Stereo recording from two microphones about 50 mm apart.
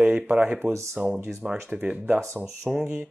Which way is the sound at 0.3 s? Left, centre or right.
Right.